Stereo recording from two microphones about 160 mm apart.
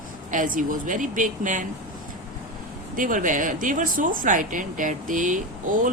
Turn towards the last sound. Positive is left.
turn(degrees=-55)  # may be behind; listen again after turning